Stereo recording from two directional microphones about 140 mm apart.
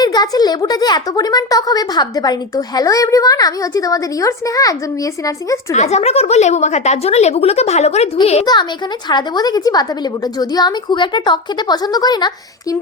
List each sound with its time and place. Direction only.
0.0 s speech: 30° left (ahead or behind)
5.7 s speech: 50° left (ahead or behind)
9.0 s speech: 30° left (ahead or behind)